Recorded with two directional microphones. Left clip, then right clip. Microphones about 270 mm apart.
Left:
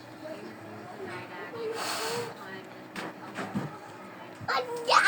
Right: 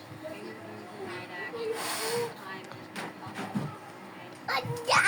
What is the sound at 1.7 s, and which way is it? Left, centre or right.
Snake, centre.